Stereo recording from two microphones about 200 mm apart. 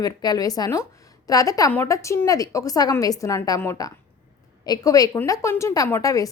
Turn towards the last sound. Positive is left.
turn(degrees=15)  # may be behind; listen again after turning